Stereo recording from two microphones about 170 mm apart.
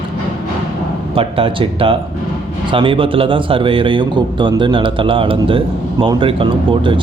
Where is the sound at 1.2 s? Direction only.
35° right (ahead or behind).